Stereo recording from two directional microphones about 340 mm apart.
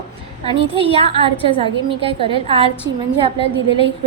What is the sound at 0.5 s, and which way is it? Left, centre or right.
A woman's voice, centre.